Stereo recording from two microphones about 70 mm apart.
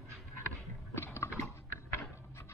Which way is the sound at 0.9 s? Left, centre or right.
Left.